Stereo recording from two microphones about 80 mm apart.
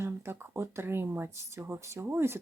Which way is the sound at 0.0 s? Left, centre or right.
Right.